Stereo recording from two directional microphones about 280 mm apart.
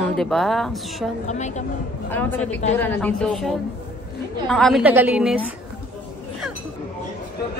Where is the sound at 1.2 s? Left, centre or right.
Left.